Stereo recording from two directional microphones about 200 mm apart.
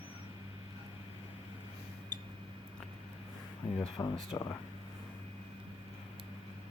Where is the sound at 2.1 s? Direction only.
20° right (ahead or behind).